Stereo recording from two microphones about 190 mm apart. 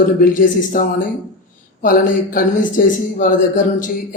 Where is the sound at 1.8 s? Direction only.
45° left (ahead or behind).